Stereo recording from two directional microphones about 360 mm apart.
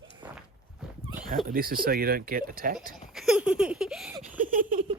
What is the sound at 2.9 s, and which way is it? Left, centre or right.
Baby laughter, centre.